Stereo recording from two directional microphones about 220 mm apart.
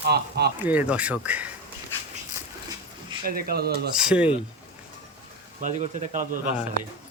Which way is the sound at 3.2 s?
40° right (ahead or behind).